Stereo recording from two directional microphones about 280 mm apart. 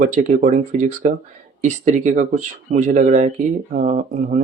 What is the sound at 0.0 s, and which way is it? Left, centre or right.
Speech, right.